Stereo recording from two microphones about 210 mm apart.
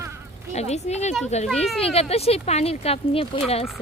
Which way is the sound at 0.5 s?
30° left (ahead or behind).